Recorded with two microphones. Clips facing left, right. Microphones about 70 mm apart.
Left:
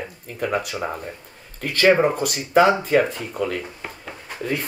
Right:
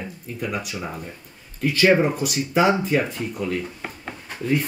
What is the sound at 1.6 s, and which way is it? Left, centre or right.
Speech, left.